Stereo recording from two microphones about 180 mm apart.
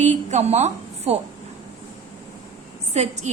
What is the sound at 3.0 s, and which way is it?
Speech, 35° right (ahead or behind).